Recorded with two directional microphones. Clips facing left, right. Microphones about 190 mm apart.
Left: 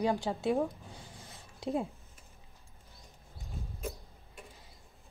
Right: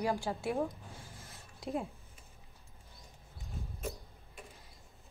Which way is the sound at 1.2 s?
Centre (ahead or behind).